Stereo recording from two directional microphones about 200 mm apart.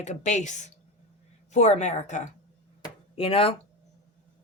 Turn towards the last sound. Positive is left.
turn(degrees=30)  # may be behind; listen again after turning